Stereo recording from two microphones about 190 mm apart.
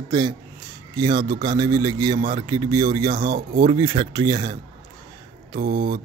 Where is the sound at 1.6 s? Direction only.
20° right (ahead or behind).